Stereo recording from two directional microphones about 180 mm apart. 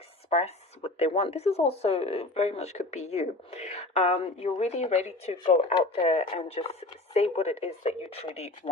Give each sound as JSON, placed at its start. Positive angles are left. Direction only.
{"t": 0.3, "sound": "speech", "side_deg": 35}